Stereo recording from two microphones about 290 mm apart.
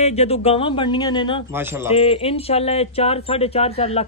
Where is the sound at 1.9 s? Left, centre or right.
Centre.